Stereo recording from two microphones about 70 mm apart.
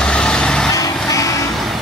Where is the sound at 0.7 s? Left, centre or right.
Left.